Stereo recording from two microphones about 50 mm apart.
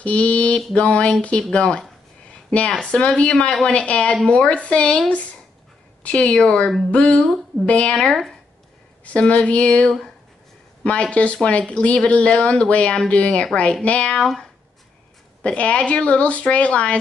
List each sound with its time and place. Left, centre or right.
0.0 s speech: left
7.9 s speech: centre
9.0 s speech: left
9.8 s speech: centre
10.8 s speech: left
14.2 s speech: centre